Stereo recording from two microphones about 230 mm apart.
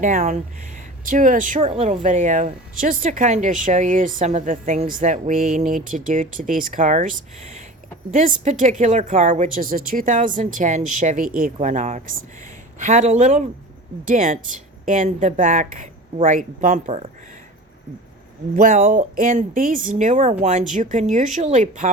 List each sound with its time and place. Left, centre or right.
0.0 s speech: right
18.5 s speech: right